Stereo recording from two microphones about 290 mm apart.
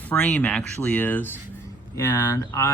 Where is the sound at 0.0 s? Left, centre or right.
Centre.